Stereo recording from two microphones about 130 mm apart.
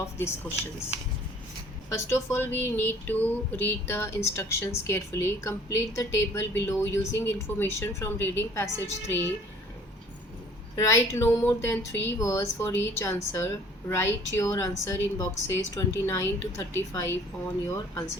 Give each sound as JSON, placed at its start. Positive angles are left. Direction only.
{"t": 1.9, "sound": "speech", "side_deg": 20}
{"t": 10.8, "sound": "speech", "side_deg": 20}